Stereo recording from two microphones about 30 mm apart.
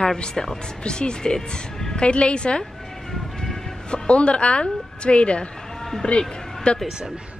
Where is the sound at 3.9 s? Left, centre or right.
Left.